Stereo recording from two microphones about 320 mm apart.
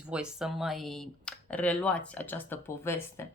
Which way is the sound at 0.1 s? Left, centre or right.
Centre.